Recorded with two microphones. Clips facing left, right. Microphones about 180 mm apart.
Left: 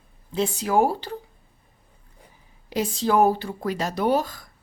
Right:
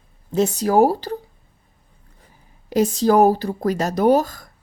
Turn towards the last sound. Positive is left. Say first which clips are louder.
# right 6 dB
turn(degrees=-45)  # may be behind; listen again after turning